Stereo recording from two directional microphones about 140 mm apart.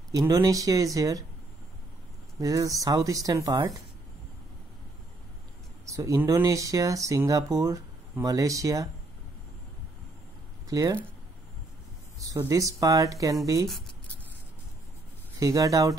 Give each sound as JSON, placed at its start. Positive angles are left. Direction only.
{"t": 0.1, "sound": "speech", "side_deg": -25}
{"t": 2.4, "sound": "speech", "side_deg": -25}
{"t": 5.9, "sound": "speech", "side_deg": -20}
{"t": 10.7, "sound": "speech", "side_deg": -25}
{"t": 12.3, "sound": "speech", "side_deg": -20}
{"t": 15.3, "sound": "speech", "side_deg": -25}